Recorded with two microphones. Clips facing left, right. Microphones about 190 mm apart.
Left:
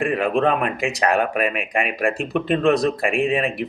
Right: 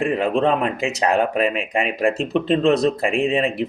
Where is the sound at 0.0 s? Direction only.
25° right (ahead or behind).